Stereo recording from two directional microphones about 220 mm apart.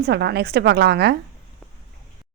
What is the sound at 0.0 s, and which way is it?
A woman's voice, 50° right (ahead or behind).